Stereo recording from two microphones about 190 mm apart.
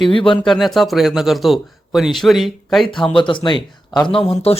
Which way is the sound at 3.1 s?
25° left (ahead or behind).